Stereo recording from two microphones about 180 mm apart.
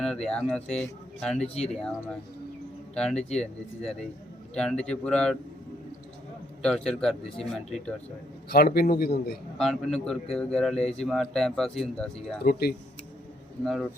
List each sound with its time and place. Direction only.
0.0 s speech: 5° left (ahead or behind)
6.6 s speech: 5° left (ahead or behind)
8.4 s a man's voice: 60° left (ahead or behind)
9.6 s speech: 5° left (ahead or behind)
12.4 s a man's voice: 60° left (ahead or behind)